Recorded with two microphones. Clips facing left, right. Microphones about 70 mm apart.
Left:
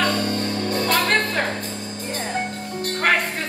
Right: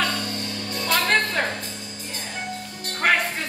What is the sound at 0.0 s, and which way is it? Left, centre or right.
Music, left.